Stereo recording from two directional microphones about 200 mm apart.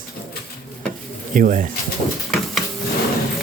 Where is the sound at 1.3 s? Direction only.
45° right (ahead or behind).